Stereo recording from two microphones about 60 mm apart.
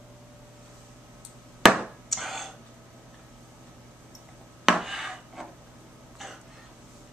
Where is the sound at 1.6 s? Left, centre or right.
Centre.